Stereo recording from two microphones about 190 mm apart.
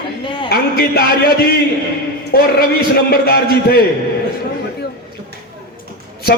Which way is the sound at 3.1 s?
55° left (ahead or behind).